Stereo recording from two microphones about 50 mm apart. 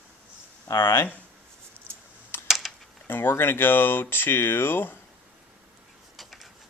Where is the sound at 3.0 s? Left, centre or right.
Left.